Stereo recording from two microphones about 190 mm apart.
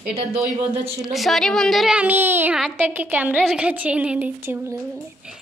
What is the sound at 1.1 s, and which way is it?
Speech, centre (ahead or behind).